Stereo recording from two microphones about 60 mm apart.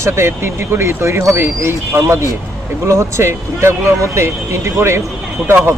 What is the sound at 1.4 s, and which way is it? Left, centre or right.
Speech, right.